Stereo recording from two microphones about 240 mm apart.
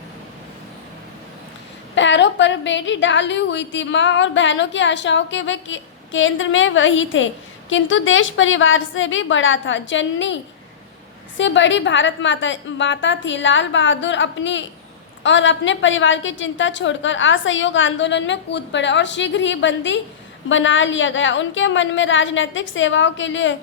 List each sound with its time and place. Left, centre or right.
2.0 s a woman's voice: left
11.3 s a woman's voice: left